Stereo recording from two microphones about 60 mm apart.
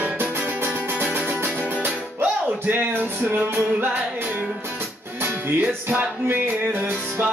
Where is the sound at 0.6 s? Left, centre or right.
Right.